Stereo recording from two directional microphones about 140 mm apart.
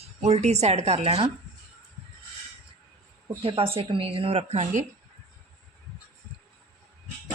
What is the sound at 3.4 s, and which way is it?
Speech, 40° right (ahead or behind).